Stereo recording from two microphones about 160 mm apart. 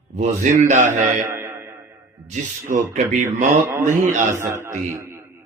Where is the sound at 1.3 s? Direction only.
15° right (ahead or behind).